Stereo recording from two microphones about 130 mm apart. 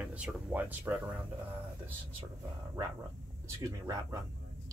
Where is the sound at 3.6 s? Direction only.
25° right (ahead or behind).